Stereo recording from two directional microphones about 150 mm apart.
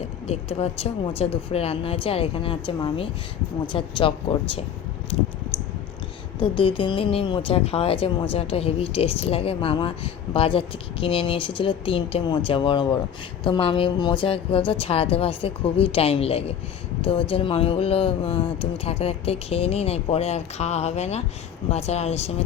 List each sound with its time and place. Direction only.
0.3 s a woman's voice: 45° left (ahead or behind)
6.4 s a woman's voice: 35° left (ahead or behind)